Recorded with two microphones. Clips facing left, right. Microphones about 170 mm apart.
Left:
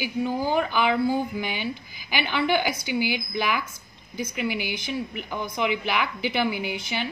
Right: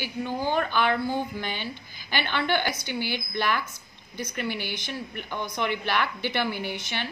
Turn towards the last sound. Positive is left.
turn(degrees=5)  # may be behind; listen again after turning